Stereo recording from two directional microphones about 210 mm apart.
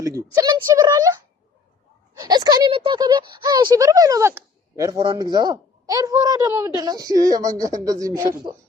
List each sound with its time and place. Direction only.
0.0 s a woman's voice: 15° right (ahead or behind)
2.1 s a woman's voice: 20° right (ahead or behind)